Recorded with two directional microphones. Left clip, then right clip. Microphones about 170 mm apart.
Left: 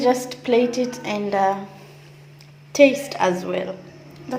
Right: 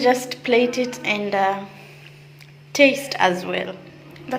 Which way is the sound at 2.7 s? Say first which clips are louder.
Left 1 dB; 10° left (ahead or behind).